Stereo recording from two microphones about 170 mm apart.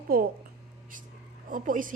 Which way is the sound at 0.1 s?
60° right (ahead or behind).